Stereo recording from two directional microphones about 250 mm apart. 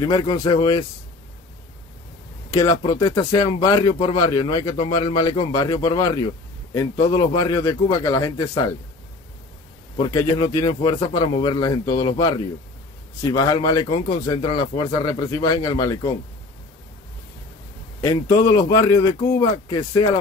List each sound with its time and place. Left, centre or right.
0.0 s a man's voice: centre
2.5 s a man's voice: centre
9.9 s a man's voice: centre
18.0 s a man's voice: centre